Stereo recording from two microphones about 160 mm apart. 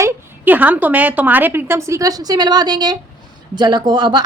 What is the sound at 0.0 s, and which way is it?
A woman's voice, 10° right (ahead or behind).